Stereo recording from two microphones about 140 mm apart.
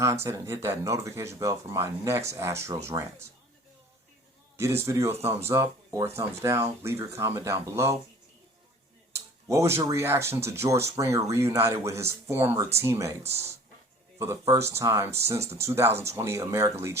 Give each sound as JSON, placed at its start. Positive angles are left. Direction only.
{"t": 0.0, "sound": "speech", "side_deg": -20}
{"t": 4.5, "sound": "a man's voice", "side_deg": -20}
{"t": 9.1, "sound": "speech", "side_deg": -20}
{"t": 13.2, "sound": "speech", "side_deg": -50}
{"t": 14.2, "sound": "speech", "side_deg": -20}